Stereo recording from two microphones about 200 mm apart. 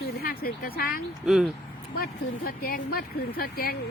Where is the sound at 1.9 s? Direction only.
45° left (ahead or behind).